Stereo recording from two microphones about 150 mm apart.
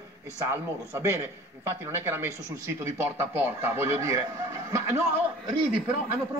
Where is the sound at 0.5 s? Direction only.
15° right (ahead or behind).